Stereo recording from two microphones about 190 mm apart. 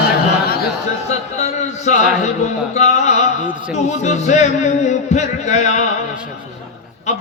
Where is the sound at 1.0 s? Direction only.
35° left (ahead or behind).